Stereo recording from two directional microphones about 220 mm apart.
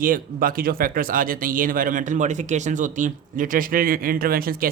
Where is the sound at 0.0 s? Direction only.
40° right (ahead or behind).